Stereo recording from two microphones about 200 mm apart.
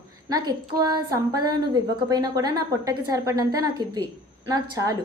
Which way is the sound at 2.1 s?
20° right (ahead or behind).